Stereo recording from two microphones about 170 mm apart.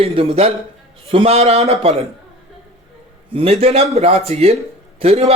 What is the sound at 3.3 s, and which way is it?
A man's voice, 35° right (ahead or behind).